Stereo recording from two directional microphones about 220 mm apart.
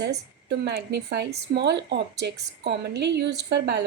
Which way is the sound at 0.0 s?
50° right (ahead or behind).